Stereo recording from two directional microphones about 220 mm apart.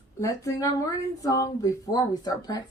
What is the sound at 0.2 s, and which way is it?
A woman's voice, 15° left (ahead or behind).